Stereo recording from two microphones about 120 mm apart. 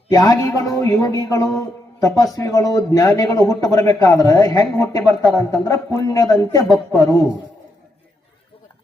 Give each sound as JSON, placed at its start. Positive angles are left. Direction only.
{"t": 0.1, "sound": "speech", "side_deg": 30}